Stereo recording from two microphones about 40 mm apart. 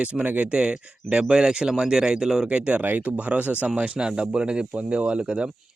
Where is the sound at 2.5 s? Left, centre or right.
Right.